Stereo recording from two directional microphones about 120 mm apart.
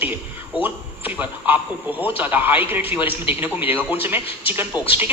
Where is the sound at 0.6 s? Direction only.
15° right (ahead or behind).